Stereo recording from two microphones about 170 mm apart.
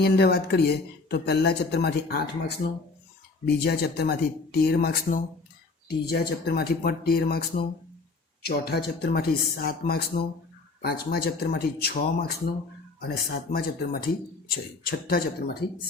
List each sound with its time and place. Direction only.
0.0 s speech: 70° left (ahead or behind)
3.4 s speech: 65° left (ahead or behind)
6.1 s speech: 70° left (ahead or behind)